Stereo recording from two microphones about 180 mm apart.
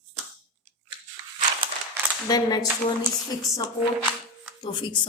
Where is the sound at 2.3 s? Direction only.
20° left (ahead or behind).